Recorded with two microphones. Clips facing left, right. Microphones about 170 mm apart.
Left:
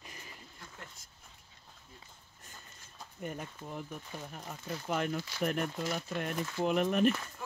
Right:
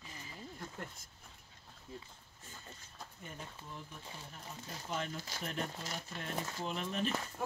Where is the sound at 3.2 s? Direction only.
60° left (ahead or behind).